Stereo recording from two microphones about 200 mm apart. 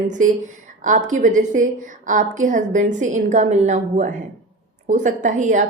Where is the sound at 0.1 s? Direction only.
40° right (ahead or behind).